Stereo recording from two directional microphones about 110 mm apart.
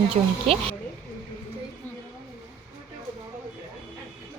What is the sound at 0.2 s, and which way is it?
Speech, 90° right.